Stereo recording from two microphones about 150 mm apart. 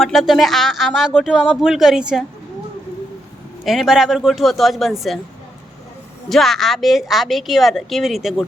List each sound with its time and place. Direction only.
0.0 s a woman's voice: centre (ahead or behind)
3.6 s a woman's voice: centre (ahead or behind)
6.2 s a woman's voice: centre (ahead or behind)